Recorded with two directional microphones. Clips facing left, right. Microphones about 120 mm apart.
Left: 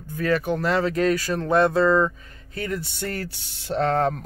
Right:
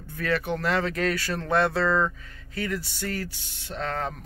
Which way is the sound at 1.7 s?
20° left (ahead or behind).